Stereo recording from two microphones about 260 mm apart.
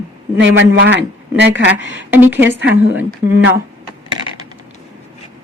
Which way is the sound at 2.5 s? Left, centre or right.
Right.